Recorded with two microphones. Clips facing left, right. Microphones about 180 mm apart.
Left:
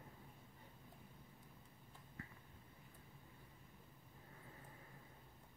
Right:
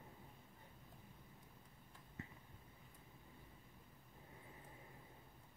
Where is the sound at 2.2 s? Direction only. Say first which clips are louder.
Right 2 dB; 20° right (ahead or behind).